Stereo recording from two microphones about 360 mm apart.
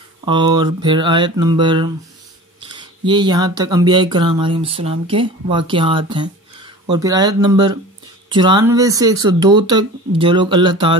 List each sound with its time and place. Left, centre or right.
0.2 s speech: centre